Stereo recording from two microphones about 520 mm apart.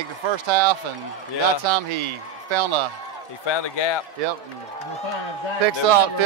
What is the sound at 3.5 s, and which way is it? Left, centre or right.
Speech, left.